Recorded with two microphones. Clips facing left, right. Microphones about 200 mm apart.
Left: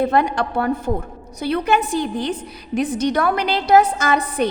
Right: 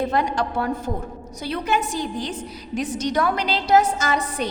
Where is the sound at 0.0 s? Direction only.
60° left (ahead or behind).